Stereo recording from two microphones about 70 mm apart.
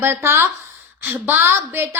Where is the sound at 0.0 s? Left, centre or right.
Right.